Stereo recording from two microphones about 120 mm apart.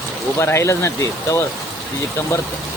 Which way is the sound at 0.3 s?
20° left (ahead or behind).